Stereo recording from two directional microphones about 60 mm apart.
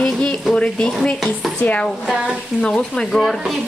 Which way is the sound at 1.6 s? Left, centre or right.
Left.